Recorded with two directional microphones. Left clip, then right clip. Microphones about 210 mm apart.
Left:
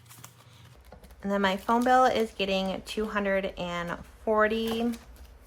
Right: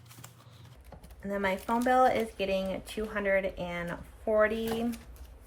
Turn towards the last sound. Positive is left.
turn(degrees=15)  # may be behind; listen again after turning